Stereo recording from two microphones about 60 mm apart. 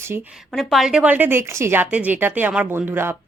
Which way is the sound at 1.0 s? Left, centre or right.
Right.